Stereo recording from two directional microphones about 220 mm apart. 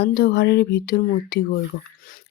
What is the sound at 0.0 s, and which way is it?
Speech, 45° left (ahead or behind).